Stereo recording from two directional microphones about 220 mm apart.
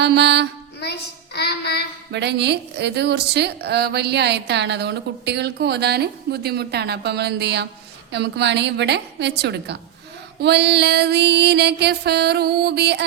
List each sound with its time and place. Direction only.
0.0 s female singing: 50° right (ahead or behind)
0.8 s child singing: 50° left (ahead or behind)
2.1 s a woman's voice: 50° right (ahead or behind)